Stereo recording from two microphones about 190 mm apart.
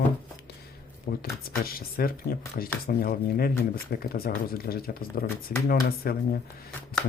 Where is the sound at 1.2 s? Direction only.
50° left (ahead or behind).